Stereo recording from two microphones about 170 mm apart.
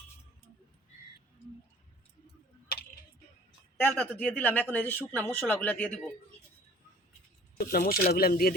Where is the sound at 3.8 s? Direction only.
10° left (ahead or behind).